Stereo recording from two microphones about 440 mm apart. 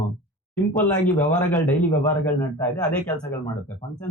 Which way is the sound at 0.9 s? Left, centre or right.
Centre.